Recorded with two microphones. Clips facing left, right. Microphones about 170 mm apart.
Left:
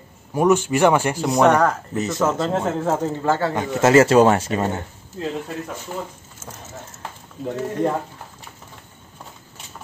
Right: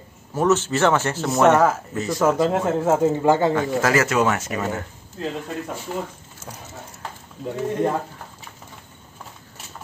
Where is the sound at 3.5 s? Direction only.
20° left (ahead or behind).